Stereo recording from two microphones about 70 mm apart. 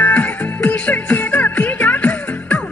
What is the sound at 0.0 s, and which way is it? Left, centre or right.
Music, left.